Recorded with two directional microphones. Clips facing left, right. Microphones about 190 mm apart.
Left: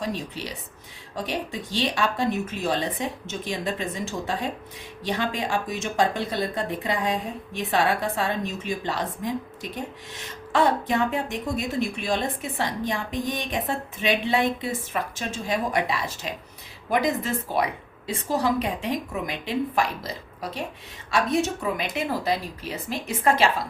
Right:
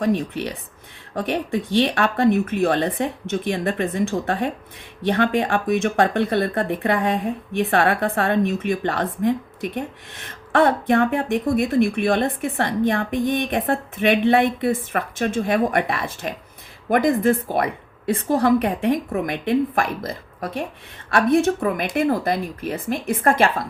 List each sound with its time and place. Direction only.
0.0 s speech: 60° right (ahead or behind)